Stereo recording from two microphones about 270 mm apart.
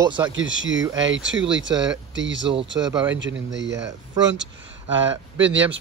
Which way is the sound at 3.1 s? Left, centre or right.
Right.